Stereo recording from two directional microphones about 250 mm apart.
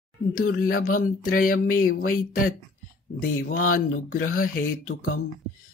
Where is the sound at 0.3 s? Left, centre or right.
Left.